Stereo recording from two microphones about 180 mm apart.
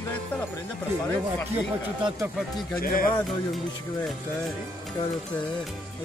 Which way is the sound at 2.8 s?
55° left (ahead or behind).